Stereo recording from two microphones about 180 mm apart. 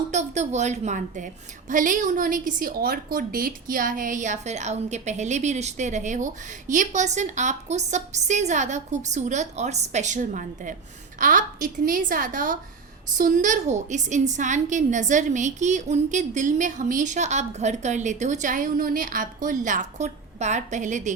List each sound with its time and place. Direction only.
0.1 s a woman's voice: 40° right (ahead or behind)